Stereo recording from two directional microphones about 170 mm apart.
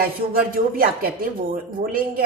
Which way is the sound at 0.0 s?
60° right (ahead or behind).